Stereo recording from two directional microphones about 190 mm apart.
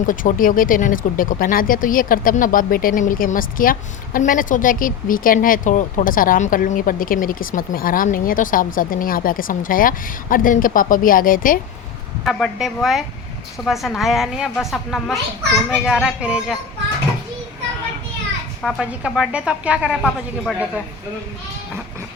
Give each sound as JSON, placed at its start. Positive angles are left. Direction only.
{"t": 0.1, "sound": "speech", "side_deg": 45}
{"t": 12.2, "sound": "a woman's voice", "side_deg": 0}
{"t": 18.6, "sound": "a woman's voice", "side_deg": -5}